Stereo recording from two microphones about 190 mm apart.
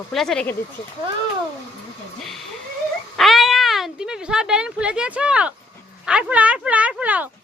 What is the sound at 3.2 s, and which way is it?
Speech, centre (ahead or behind).